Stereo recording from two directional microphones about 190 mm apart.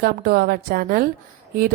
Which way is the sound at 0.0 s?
55° right (ahead or behind).